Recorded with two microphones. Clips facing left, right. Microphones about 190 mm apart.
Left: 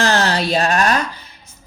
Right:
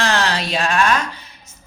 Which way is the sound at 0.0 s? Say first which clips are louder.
Left 3 dB; 35° left (ahead or behind).